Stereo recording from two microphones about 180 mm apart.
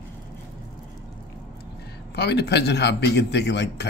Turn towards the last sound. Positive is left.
turn(degrees=70)  # may be behind; listen again after turning